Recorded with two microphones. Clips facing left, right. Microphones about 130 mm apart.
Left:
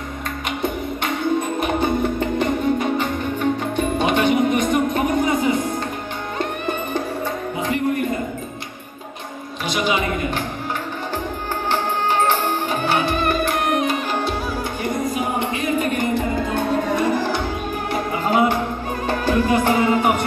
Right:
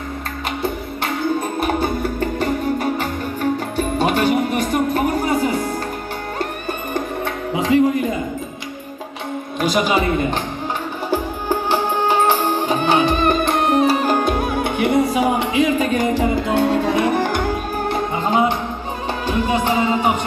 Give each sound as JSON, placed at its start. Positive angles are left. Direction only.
{"t": 1.6, "sound": "music", "side_deg": -35}
{"t": 7.5, "sound": "music", "side_deg": -90}
{"t": 9.6, "sound": "music", "side_deg": -40}
{"t": 11.1, "sound": "music", "side_deg": -10}
{"t": 17.9, "sound": "music", "side_deg": -25}